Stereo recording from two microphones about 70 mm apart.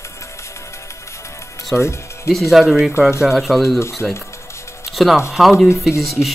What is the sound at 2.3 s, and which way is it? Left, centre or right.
Speech, left.